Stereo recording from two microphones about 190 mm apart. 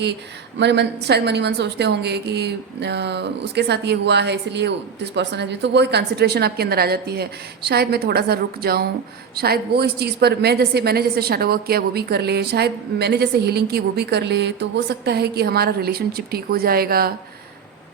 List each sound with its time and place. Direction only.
0.6 s a woman's voice: 65° right (ahead or behind)